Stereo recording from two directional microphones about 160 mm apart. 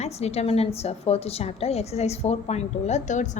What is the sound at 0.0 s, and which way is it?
A woman's voice, 40° left (ahead or behind).